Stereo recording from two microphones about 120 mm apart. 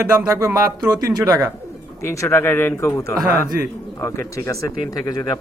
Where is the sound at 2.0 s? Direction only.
20° left (ahead or behind).